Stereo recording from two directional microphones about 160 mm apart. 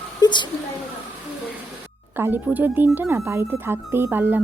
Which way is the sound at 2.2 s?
15° right (ahead or behind).